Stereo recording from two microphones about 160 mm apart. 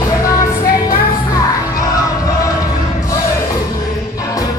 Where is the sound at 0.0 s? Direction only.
20° left (ahead or behind).